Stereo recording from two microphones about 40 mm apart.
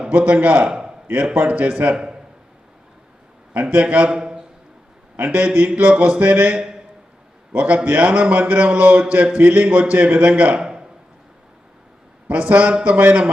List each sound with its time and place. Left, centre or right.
0.2 s a man's voice: right
3.5 s a man's voice: right
4.1 s a sound: centre
5.3 s a man's voice: right
10.6 s a sound: centre
12.3 s a man's voice: right